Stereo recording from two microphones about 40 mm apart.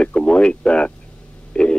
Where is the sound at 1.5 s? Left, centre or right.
Left.